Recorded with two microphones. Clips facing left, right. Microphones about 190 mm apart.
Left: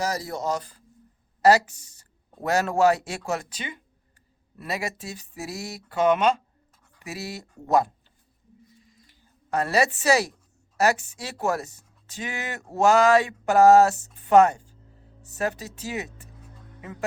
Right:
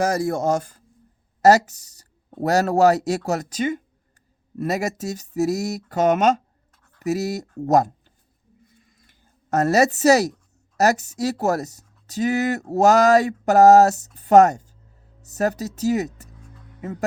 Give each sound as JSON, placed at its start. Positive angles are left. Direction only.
{"t": 0.0, "sound": "speech", "side_deg": -50}
{"t": 8.6, "sound": "a sound", "side_deg": -55}
{"t": 10.8, "sound": "speech", "side_deg": -40}